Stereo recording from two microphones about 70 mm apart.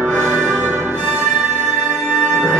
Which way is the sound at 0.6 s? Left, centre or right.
Right.